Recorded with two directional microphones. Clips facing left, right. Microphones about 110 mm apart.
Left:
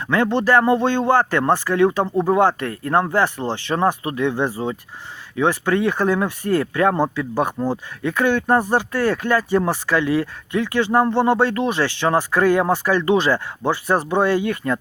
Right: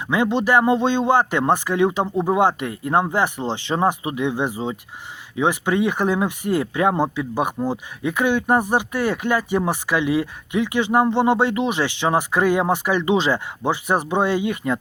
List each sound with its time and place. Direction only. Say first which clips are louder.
0.1 s speech: left 1 dB; 15° right (ahead or behind)